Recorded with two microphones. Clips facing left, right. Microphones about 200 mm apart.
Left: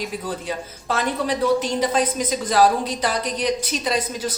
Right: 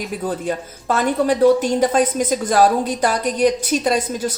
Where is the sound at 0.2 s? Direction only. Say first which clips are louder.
Right 5 dB; 50° right (ahead or behind).